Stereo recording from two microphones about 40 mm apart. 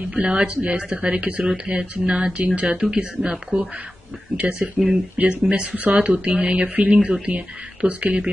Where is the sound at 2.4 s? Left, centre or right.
Right.